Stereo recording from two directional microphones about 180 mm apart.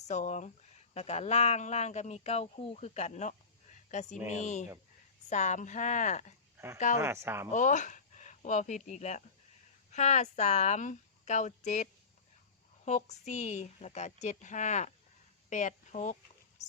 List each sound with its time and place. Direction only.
0.1 s speech: 40° left (ahead or behind)
5.3 s a woman's voice: 40° left (ahead or behind)
7.0 s speech: 15° right (ahead or behind)
7.5 s a woman's voice: 45° left (ahead or behind)